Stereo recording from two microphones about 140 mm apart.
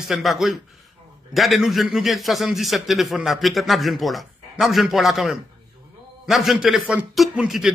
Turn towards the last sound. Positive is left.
turn(degrees=-5)  # may be behind; listen again after turning